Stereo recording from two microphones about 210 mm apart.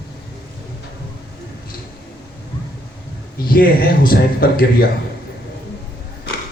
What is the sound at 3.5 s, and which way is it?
Speech, 45° left (ahead or behind).